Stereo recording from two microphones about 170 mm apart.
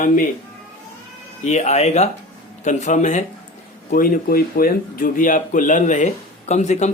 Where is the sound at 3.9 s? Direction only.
55° left (ahead or behind).